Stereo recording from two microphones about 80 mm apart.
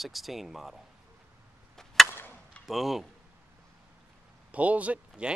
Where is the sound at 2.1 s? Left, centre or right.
Left.